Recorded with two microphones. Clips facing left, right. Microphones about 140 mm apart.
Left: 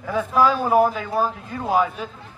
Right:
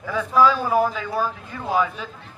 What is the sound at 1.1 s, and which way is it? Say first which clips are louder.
Speech: left 2 dB; 30° left (ahead or behind).